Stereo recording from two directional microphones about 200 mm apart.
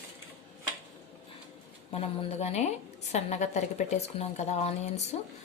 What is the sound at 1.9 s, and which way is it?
A woman's voice, 30° left (ahead or behind).